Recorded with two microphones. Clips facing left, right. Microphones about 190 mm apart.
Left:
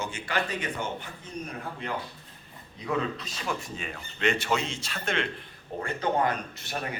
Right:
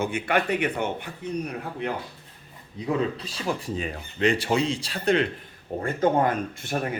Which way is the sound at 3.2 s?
30° right (ahead or behind).